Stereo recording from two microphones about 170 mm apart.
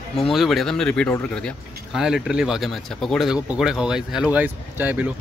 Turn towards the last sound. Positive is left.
turn(degrees=-10)  # may be behind; listen again after turning